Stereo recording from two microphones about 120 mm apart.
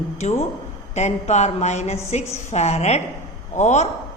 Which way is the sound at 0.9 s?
70° left (ahead or behind).